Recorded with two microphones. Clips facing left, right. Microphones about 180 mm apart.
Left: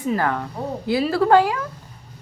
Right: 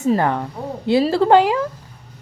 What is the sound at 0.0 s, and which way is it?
Speech, 25° right (ahead or behind).